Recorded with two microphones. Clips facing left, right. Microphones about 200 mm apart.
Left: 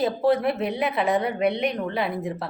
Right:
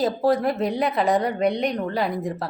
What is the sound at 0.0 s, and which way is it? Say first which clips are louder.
Speech: right 1 dB; centre (ahead or behind).